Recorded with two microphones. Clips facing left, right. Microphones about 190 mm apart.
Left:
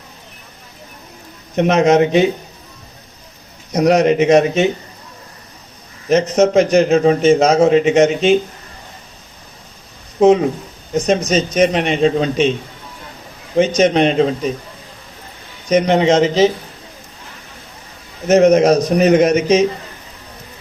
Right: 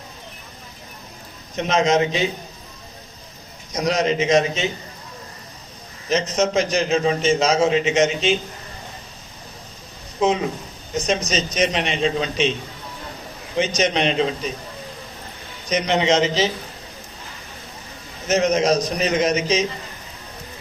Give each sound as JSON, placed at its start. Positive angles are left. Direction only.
{"t": 1.5, "sound": "speech", "side_deg": 60}
{"t": 3.7, "sound": "speech", "side_deg": 60}
{"t": 6.1, "sound": "speech", "side_deg": 55}
{"t": 10.2, "sound": "a man's voice", "side_deg": 50}
{"t": 13.6, "sound": "a man's voice", "side_deg": 50}
{"t": 15.7, "sound": "a man's voice", "side_deg": 50}
{"t": 18.3, "sound": "speech", "side_deg": 55}